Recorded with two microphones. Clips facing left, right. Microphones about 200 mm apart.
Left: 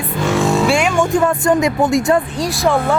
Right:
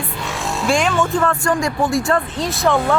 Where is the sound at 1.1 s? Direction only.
20° left (ahead or behind).